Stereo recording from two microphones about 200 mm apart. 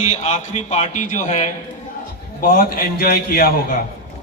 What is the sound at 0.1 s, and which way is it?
A man's voice, 35° left (ahead or behind).